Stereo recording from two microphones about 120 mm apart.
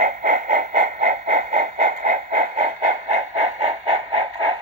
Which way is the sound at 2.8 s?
90° right.